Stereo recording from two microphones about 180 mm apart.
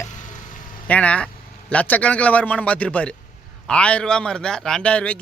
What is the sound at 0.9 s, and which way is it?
A man's voice, 5° left (ahead or behind).